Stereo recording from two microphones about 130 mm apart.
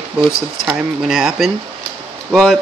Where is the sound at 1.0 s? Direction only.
5° right (ahead or behind).